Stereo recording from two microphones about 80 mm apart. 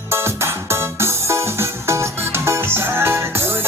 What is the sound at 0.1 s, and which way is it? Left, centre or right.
Music, right.